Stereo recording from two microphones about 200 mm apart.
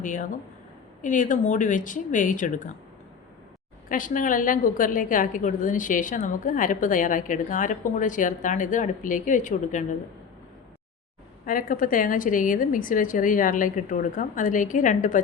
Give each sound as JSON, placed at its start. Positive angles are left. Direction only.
{"t": 0.0, "sound": "a woman's voice", "side_deg": 40}
{"t": 3.8, "sound": "a woman's voice", "side_deg": 40}
{"t": 11.4, "sound": "a woman's voice", "side_deg": 45}